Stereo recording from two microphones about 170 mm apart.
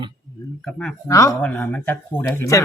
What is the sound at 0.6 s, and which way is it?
Speech, 5° left (ahead or behind).